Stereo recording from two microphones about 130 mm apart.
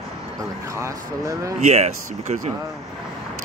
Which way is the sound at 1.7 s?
60° right (ahead or behind).